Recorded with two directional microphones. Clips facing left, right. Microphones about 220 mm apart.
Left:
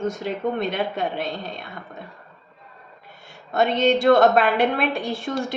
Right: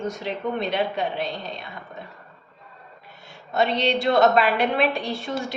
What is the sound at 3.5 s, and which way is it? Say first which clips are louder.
A woman's voice: left 3 dB; 45° left (ahead or behind).